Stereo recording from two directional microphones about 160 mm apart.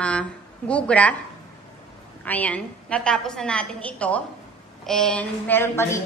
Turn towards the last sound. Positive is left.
turn(degrees=15)  # may be behind; listen again after turning